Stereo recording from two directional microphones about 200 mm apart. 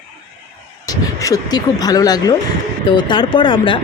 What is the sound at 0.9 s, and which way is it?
Speech, 15° left (ahead or behind).